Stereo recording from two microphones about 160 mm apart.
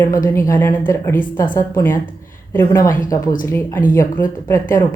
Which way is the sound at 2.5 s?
15° left (ahead or behind).